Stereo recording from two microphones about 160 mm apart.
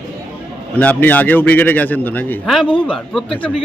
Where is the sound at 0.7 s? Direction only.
10° left (ahead or behind).